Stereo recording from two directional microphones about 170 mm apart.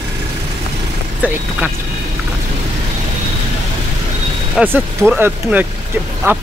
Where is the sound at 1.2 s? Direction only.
10° right (ahead or behind).